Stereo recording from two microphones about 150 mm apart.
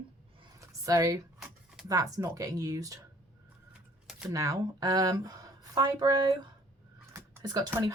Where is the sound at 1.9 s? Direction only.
25° right (ahead or behind).